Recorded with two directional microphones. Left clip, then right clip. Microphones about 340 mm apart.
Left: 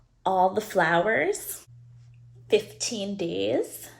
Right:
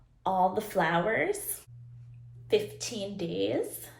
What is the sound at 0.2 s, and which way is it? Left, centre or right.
Speech, left.